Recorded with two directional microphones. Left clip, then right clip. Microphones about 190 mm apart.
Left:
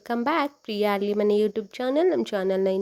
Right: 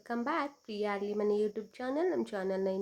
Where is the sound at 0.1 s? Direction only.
40° left (ahead or behind).